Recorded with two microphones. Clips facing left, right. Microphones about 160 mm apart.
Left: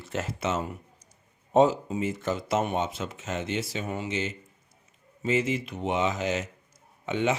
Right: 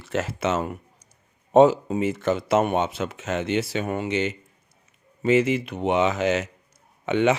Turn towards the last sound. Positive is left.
turn(degrees=-70)  # may be behind; listen again after turning